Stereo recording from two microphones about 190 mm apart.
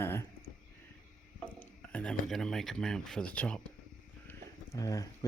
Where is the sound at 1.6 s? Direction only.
5° left (ahead or behind).